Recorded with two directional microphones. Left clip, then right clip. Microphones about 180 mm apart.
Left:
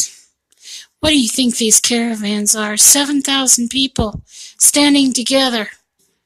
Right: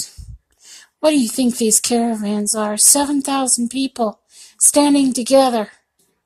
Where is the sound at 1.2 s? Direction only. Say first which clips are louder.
Left 3 dB; 30° left (ahead or behind).